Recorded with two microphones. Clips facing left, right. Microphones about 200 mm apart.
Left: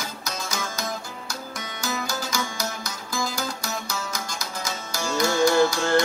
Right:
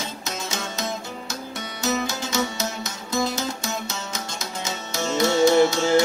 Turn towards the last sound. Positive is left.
turn(degrees=-20)  # may be behind; listen again after turning